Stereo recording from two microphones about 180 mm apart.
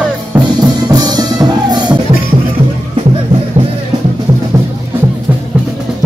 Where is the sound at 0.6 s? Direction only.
20° right (ahead or behind).